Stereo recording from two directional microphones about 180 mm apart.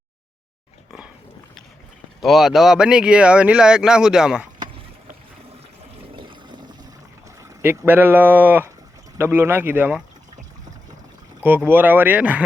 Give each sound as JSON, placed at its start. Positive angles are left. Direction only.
{"t": 2.2, "sound": "speech", "side_deg": 0}
{"t": 6.0, "sound": "toilet flush", "side_deg": -25}
{"t": 7.6, "sound": "speech", "side_deg": -10}
{"t": 11.4, "sound": "speech", "side_deg": -10}